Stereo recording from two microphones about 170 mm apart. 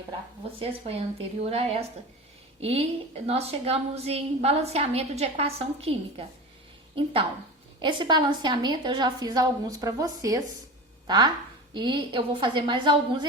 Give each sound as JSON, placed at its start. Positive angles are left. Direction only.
{"t": 0.6, "sound": "a woman's voice", "side_deg": -35}